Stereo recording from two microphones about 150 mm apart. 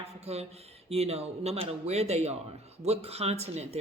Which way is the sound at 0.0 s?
45° right (ahead or behind).